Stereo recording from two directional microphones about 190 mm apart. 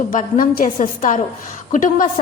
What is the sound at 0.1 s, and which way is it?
A woman's voice, 45° left (ahead or behind).